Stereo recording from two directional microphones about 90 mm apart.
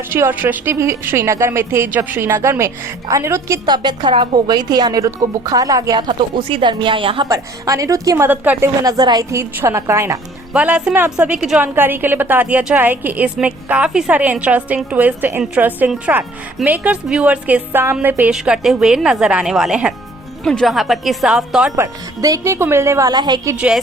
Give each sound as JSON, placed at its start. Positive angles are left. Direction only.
{"t": 0.1, "sound": "a woman's voice", "side_deg": -20}
{"t": 3.7, "sound": "speech", "side_deg": -60}
{"t": 6.5, "sound": "a woman's voice", "side_deg": -65}
{"t": 7.3, "sound": "speech", "side_deg": -40}
{"t": 9.3, "sound": "speech", "side_deg": -30}
{"t": 10.5, "sound": "a woman's voice", "side_deg": -15}
{"t": 11.3, "sound": "a woman's voice", "side_deg": -10}
{"t": 11.6, "sound": "a woman's voice", "side_deg": -25}
{"t": 18.3, "sound": "a woman's voice", "side_deg": -5}
{"t": 20.4, "sound": "a woman's voice", "side_deg": 5}
{"t": 21.8, "sound": "speech", "side_deg": -35}
{"t": 23.0, "sound": "speech", "side_deg": -50}
{"t": 23.6, "sound": "a woman's voice", "side_deg": -10}